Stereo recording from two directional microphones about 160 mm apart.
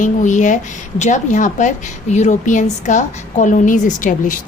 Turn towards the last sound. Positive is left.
turn(degrees=60)  # may be behind; listen again after turning